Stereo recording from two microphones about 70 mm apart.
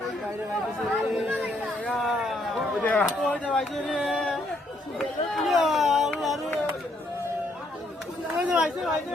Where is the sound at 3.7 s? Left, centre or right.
Centre.